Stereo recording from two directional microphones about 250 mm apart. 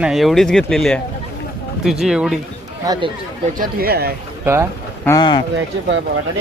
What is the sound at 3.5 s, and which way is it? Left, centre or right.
Speech, right.